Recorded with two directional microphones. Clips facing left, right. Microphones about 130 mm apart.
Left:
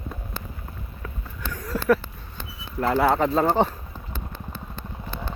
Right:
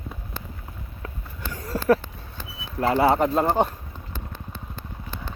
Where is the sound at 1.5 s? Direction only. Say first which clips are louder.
Right 1 dB; 30° right (ahead or behind).